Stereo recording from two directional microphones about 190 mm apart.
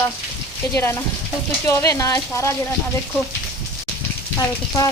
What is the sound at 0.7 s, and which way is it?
Speech, 10° left (ahead or behind).